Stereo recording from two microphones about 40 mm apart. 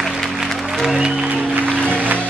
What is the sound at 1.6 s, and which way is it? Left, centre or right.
Music, left.